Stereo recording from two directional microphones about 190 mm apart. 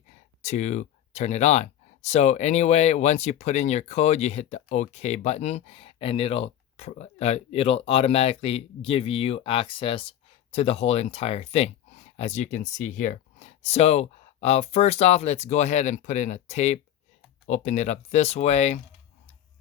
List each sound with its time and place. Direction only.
0.4 s speech: 35° left (ahead or behind)